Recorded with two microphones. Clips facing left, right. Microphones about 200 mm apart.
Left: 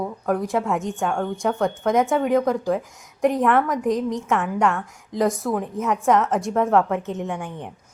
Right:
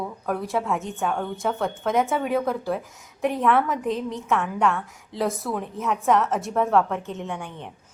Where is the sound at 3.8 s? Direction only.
15° left (ahead or behind).